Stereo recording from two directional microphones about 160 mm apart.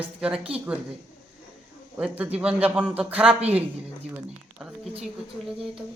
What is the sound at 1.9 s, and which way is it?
Speech, 10° right (ahead or behind).